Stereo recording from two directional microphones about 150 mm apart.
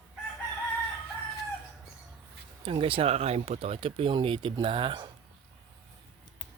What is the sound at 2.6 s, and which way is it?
Speech, 35° right (ahead or behind).